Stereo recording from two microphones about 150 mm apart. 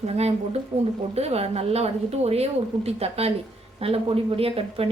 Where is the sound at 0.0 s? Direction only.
45° right (ahead or behind).